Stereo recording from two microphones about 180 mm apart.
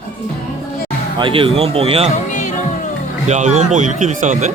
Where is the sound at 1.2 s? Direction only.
30° right (ahead or behind).